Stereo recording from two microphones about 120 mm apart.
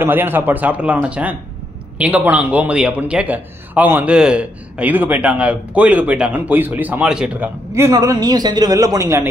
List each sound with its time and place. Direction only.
0.0 s a man's voice: 15° right (ahead or behind)
7.9 s a man's voice: 30° right (ahead or behind)